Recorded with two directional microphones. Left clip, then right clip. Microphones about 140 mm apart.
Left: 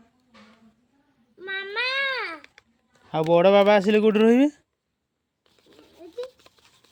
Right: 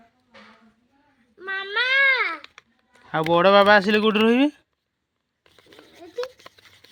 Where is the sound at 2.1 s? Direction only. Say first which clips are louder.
Right 7 dB; 25° left (ahead or behind).